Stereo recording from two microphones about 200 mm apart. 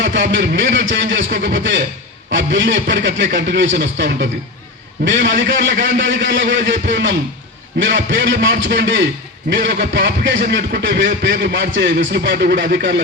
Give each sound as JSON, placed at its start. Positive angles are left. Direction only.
{"t": 0.2, "sound": "a man's voice", "side_deg": -65}
{"t": 11.5, "sound": "a man's voice", "side_deg": -65}